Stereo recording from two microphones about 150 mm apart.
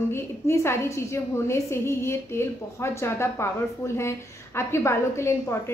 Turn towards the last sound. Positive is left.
turn(degrees=20)  # may be behind; listen again after turning